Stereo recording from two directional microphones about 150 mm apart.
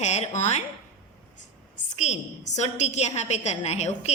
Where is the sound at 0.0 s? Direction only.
45° left (ahead or behind).